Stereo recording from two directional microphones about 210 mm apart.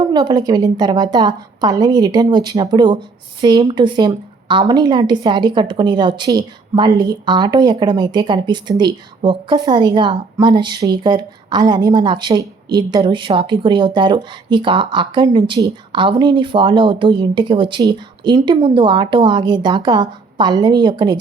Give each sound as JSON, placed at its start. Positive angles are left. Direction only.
{"t": 0.0, "sound": "a woman's voice", "side_deg": -20}